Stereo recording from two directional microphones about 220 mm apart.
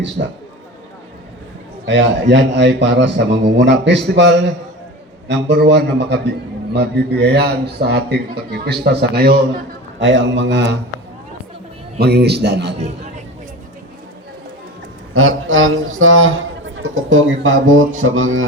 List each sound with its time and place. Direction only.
1.9 s a man's voice: 55° right (ahead or behind)
11.9 s a man's voice: 45° right (ahead or behind)
15.1 s a man's voice: 65° right (ahead or behind)